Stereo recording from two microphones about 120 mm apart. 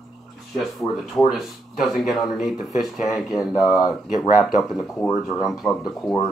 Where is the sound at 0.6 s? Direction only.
Centre (ahead or behind).